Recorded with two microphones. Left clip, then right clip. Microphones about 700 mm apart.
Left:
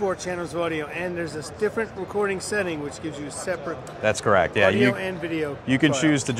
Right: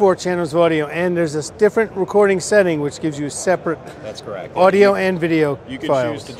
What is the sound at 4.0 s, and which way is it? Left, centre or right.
Speech, left.